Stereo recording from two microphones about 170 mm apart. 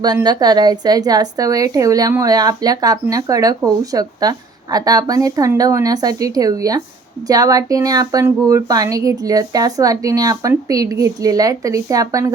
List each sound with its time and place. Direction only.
0.0 s a woman's voice: 25° right (ahead or behind)